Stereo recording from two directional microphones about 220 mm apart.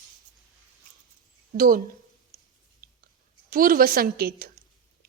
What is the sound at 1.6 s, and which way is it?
Speech, 40° right (ahead or behind).